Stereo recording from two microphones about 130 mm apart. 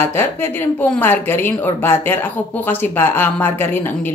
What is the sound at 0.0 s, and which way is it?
Speech, 20° left (ahead or behind).